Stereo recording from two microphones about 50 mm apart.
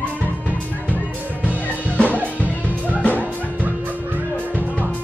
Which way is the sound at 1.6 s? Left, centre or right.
Left.